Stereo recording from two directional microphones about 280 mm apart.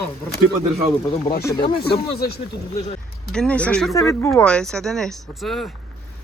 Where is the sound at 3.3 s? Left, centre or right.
Centre.